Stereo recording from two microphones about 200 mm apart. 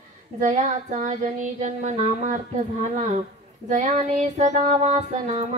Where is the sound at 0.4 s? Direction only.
35° right (ahead or behind).